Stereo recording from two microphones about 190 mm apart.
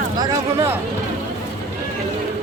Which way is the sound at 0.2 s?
15° right (ahead or behind).